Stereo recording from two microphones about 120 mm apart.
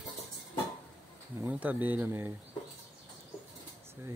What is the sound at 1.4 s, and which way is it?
Speech, 15° right (ahead or behind).